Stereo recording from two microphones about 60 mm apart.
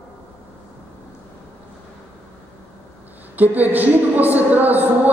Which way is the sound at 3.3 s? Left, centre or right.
Right.